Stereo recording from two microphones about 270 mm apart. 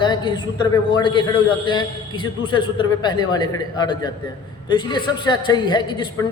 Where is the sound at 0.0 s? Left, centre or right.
Centre.